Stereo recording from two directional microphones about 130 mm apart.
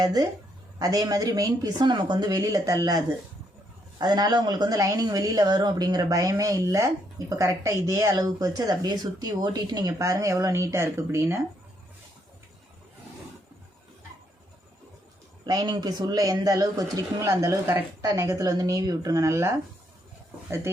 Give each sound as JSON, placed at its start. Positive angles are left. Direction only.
{"t": 0.0, "sound": "a woman's voice", "side_deg": -30}
{"t": 15.4, "sound": "a woman's voice", "side_deg": -30}